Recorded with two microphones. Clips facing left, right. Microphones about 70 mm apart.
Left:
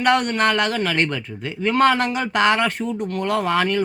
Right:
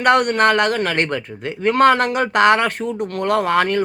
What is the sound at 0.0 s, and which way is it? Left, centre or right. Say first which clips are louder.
Speech: right 4 dB; right.